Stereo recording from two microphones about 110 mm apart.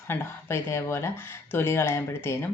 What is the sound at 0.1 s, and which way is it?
Speech, 25° left (ahead or behind).